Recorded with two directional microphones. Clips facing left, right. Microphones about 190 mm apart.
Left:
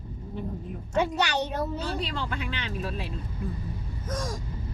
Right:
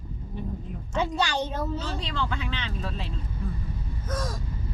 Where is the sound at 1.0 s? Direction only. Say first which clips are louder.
Left 1 dB; 15° left (ahead or behind).